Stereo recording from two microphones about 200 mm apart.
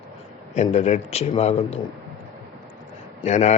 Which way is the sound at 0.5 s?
35° left (ahead or behind).